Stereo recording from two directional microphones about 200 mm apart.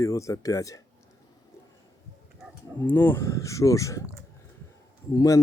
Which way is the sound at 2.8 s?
10° left (ahead or behind).